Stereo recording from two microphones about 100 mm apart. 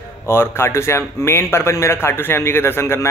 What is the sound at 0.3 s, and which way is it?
A man's voice, 25° left (ahead or behind).